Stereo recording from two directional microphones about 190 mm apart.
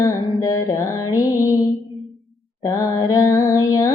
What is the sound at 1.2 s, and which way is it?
Music, 15° left (ahead or behind).